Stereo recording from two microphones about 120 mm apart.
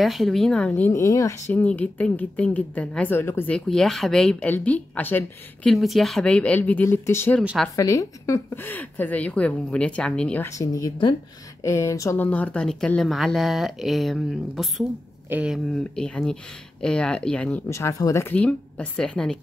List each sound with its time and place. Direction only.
0.0 s a woman's voice: centre (ahead or behind); by 1.4 s 25° left (ahead or behind)
1.5 s a woman's voice: 15° left (ahead or behind)
3.5 s a woman's voice: 5° left (ahead or behind)
5.7 s a woman's voice: centre (ahead or behind)
10.5 s speech: 30° left (ahead or behind)
12.2 s speech: 15° left (ahead or behind); by 15.6 s 10° right (ahead or behind)
15.7 s a woman's voice: 5° left (ahead or behind)
17.6 s speech: 25° left (ahead or behind)
18.2 s a woman's voice: 10° left (ahead or behind)